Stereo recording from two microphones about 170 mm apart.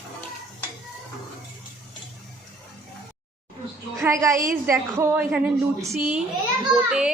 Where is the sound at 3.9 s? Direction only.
20° right (ahead or behind).